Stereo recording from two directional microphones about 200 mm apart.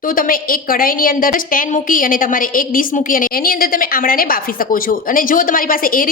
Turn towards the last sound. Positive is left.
turn(degrees=45)  # may be behind; listen again after turning